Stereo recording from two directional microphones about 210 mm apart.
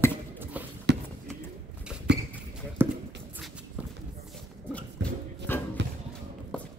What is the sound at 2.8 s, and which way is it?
Shuffle, 10° right (ahead or behind).